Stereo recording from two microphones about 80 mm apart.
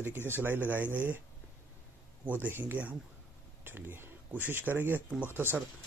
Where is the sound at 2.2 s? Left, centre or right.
Centre.